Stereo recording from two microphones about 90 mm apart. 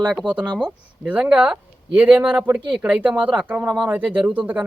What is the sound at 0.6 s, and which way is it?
Speech, 10° right (ahead or behind).